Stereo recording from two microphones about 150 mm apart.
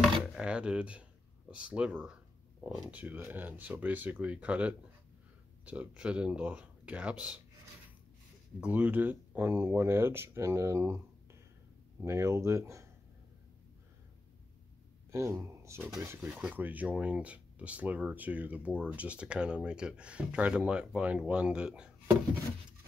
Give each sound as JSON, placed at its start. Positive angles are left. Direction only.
{"t": 0.0, "sound": "a sound", "side_deg": -5}
{"t": 1.5, "sound": "speech", "side_deg": -5}
{"t": 8.5, "sound": "speech", "side_deg": -10}
{"t": 12.0, "sound": "speech", "side_deg": -20}
{"t": 15.0, "sound": "speech", "side_deg": -20}